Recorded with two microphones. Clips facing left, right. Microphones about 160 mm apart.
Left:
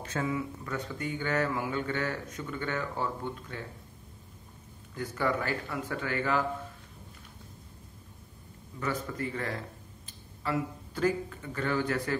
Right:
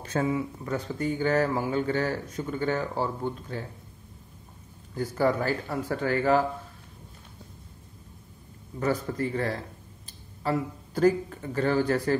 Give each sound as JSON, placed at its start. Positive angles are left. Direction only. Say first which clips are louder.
{"t": 0.0, "sound": "speech", "louder": "right 5 dB", "side_deg": -35}
{"t": 4.9, "sound": "speech", "louder": "right 5 dB", "side_deg": -35}
{"t": 8.7, "sound": "speech", "louder": "right 6 dB", "side_deg": -40}